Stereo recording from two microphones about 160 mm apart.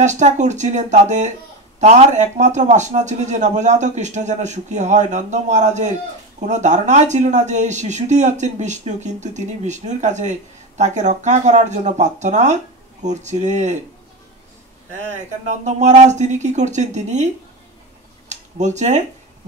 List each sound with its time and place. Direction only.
0.0 s speech: 45° right (ahead or behind)
15.1 s speech: 45° right (ahead or behind)
18.8 s speech: 45° right (ahead or behind)